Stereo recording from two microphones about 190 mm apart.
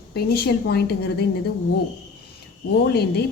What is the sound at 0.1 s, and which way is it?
A woman's voice, 55° left (ahead or behind).